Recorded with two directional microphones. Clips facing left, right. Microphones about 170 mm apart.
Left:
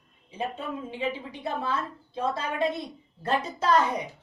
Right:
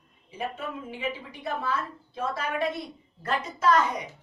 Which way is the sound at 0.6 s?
30° left (ahead or behind).